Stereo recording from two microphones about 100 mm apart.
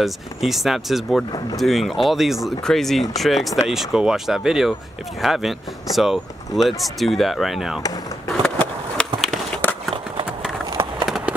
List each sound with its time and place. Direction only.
0.0 s speech: centre (ahead or behind)
8.4 s skateboard: 10° left (ahead or behind)
10.7 s run: 55° right (ahead or behind)
11.1 s run: 5° right (ahead or behind)